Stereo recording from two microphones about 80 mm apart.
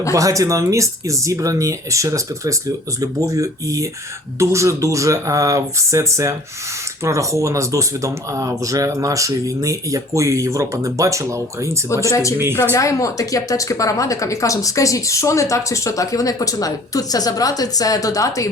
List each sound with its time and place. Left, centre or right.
0.1 s speech: right
12.0 s speech: left